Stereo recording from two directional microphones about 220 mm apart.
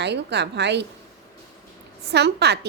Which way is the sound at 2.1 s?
50° right (ahead or behind).